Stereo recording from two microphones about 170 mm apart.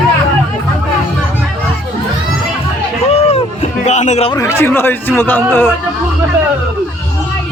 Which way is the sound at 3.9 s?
45° left (ahead or behind).